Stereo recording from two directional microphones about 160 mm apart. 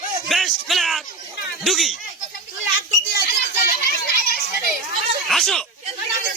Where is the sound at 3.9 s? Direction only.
70° left (ahead or behind).